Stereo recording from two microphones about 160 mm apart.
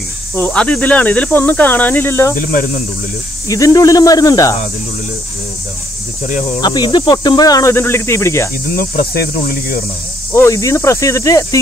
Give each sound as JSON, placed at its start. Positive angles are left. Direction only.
{"t": 0.4, "sound": "speech", "side_deg": 10}
{"t": 2.3, "sound": "speech", "side_deg": 60}
{"t": 3.4, "sound": "speech", "side_deg": 20}
{"t": 6.6, "sound": "speech", "side_deg": 25}
{"t": 8.6, "sound": "cricket", "side_deg": 70}
{"t": 10.3, "sound": "speech", "side_deg": 20}